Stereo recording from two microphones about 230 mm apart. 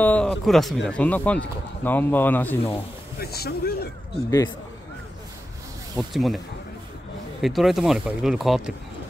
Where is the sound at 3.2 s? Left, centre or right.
Left.